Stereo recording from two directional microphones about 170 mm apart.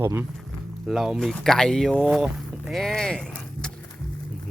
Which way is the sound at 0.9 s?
Centre (ahead or behind).